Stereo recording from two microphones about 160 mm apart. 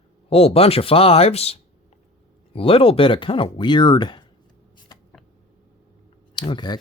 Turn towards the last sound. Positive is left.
turn(degrees=30)  # may be behind; listen again after turning